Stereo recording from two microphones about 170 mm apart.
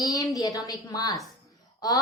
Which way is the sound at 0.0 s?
20° left (ahead or behind).